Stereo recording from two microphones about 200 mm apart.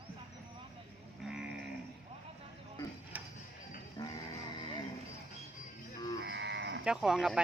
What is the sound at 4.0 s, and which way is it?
Music, 20° left (ahead or behind).